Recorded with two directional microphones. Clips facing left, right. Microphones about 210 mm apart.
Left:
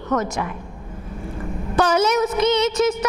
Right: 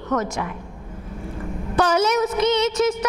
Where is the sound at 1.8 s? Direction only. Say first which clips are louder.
Left 1 dB; 10° left (ahead or behind).